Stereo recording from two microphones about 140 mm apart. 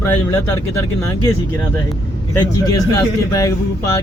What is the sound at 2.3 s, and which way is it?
Speech, 25° left (ahead or behind).